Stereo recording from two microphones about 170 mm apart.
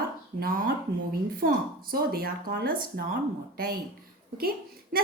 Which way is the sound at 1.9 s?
60° right (ahead or behind).